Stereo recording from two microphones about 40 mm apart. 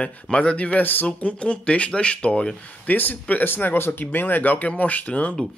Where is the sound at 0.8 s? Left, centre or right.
Left.